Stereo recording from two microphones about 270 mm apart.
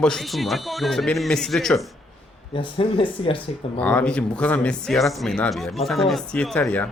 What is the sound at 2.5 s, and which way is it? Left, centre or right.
Speech, centre.